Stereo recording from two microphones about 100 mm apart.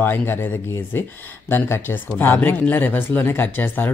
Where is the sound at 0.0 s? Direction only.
20° left (ahead or behind).